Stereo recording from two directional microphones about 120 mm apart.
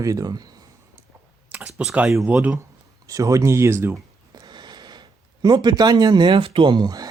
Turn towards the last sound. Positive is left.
turn(degrees=-35)  # may be behind; listen again after turning